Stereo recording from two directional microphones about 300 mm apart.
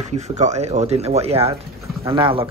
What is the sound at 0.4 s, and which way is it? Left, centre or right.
Speech, right.